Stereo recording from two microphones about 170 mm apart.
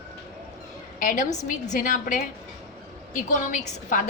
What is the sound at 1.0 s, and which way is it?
A woman's voice, 45° left (ahead or behind).